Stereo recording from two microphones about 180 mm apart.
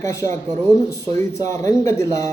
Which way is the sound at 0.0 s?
15° left (ahead or behind).